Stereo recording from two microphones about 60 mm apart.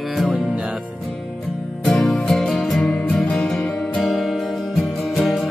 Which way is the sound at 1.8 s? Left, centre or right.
Centre.